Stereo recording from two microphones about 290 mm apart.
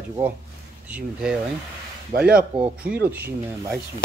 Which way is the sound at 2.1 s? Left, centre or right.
Right.